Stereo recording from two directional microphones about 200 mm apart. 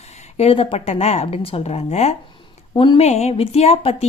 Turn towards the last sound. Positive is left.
turn(degrees=30)  # may be behind; listen again after turning